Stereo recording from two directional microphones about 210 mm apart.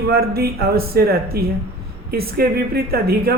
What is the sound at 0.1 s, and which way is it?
Speech, 45° right (ahead or behind).